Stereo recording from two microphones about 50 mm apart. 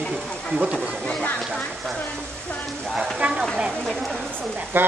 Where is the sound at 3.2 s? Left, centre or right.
Right.